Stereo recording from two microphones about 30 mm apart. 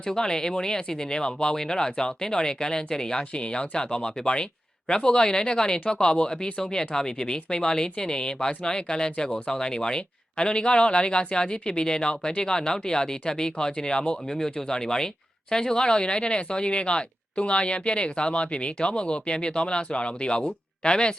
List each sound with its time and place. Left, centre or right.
0.0 s speech: left
14.3 s speech: centre